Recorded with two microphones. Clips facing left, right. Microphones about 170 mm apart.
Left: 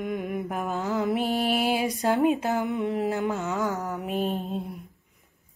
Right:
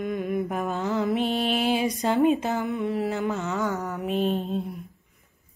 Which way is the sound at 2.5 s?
15° left (ahead or behind).